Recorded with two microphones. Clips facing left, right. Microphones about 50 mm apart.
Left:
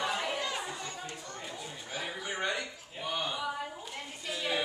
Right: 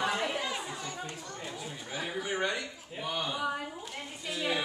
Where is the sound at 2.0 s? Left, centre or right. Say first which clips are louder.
Right 3 dB; centre.